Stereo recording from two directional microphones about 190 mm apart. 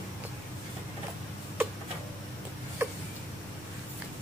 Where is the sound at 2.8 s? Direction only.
10° right (ahead or behind).